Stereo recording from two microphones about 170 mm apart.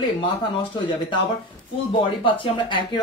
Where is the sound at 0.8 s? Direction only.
30° left (ahead or behind).